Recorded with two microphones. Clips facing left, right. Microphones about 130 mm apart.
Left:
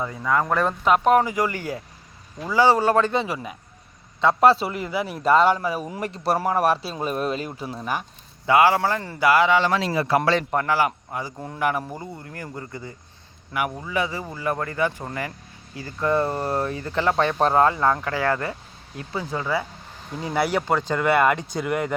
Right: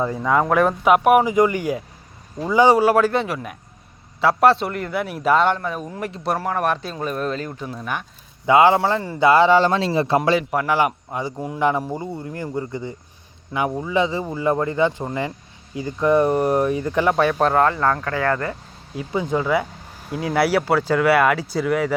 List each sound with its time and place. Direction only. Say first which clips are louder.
0.0 s speech: right 6 dB; 30° right (ahead or behind)
0.3 s a man's voice: right 4 dB; 15° right (ahead or behind); by 8.0 s 5° left (ahead or behind)
8.4 s a man's voice: right 3 dB; 20° right (ahead or behind)
10.2 s speech: right 2 dB; 10° right (ahead or behind)
10.7 s a man's voice: right 2 dB; 20° right (ahead or behind)
17.5 s speech: right 1 dB; 20° left (ahead or behind)
19.1 s a man's voice: right 6 dB; 15° right (ahead or behind); by 21.9 s centre (ahead or behind)